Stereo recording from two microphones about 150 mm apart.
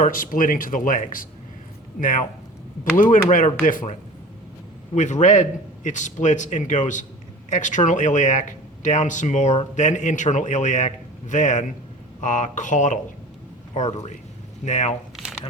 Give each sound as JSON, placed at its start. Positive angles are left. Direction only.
{"t": 0.0, "sound": "speech", "side_deg": 65}
{"t": 4.9, "sound": "a man's voice", "side_deg": 55}
{"t": 15.1, "sound": "squish", "side_deg": -5}